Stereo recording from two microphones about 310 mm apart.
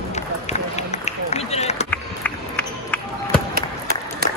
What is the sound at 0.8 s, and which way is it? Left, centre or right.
Run, left.